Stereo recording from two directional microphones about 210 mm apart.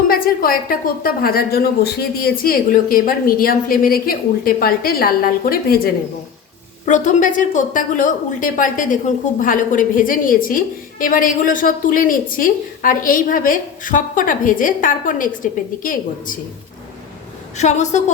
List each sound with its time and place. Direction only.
0.1 s a woman's voice: 45° left (ahead or behind)
17.6 s a woman's voice: 35° left (ahead or behind)